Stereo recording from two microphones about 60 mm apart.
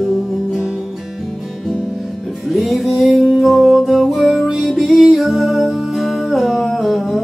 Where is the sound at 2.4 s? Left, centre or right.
Centre.